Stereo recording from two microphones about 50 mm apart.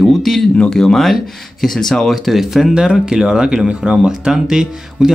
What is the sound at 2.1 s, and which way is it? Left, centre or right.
Speech, centre.